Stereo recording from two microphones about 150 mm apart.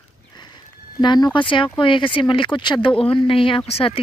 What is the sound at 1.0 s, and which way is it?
Speech, 30° left (ahead or behind).